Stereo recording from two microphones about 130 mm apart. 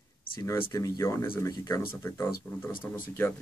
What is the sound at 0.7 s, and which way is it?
Speech, 25° left (ahead or behind).